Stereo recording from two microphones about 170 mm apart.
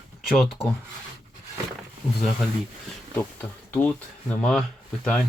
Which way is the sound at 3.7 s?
10° left (ahead or behind).